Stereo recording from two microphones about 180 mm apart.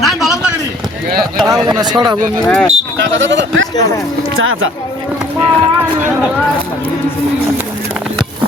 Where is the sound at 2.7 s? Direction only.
90° right.